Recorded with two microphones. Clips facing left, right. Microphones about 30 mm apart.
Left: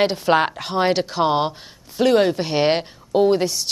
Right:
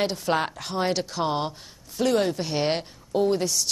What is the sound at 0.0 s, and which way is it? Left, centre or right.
A woman's voice, left.